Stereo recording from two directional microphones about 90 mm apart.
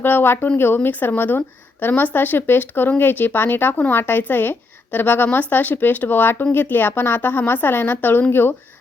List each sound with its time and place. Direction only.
0.0 s speech: 25° left (ahead or behind)